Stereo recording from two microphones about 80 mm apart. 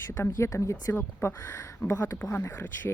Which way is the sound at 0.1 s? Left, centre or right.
Left.